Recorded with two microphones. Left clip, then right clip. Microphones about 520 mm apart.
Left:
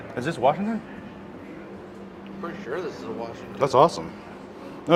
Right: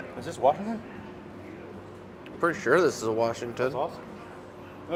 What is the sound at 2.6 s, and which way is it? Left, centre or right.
Speech, right.